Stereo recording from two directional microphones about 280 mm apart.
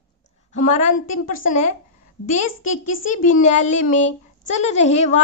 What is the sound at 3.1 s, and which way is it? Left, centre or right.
A child's voice, left.